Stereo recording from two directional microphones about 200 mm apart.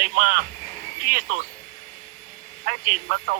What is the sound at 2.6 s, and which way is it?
Speech, 45° right (ahead or behind).